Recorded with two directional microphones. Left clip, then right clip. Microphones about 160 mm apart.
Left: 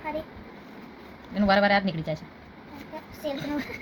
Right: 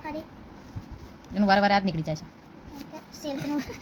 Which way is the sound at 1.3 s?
20° right (ahead or behind).